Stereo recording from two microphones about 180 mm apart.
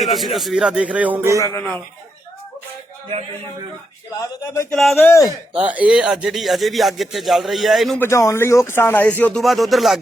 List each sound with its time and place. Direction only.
0.1 s a man's voice: centre (ahead or behind)
1.4 s speech: 20° left (ahead or behind)
4.1 s speech: 20° left (ahead or behind)
4.7 s a man's voice: centre (ahead or behind)
4.9 s speech: 15° left (ahead or behind)
5.5 s a man's voice: 10° right (ahead or behind)
8.0 s speech: 15° left (ahead or behind); by 10.0 s centre (ahead or behind)